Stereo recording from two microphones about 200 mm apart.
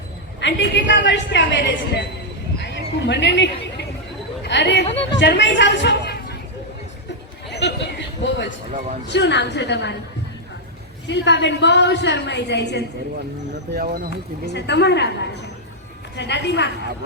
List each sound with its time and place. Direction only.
0.3 s a woman's voice: 60° left (ahead or behind)
2.6 s neigh: 60° left (ahead or behind)
4.4 s a woman's voice: 60° left (ahead or behind)
7.5 s a woman's voice: 60° left (ahead or behind)
11.0 s a woman's voice: 60° left (ahead or behind)
13.7 s speech: 45° right (ahead or behind)
14.4 s a woman's voice: 60° left (ahead or behind)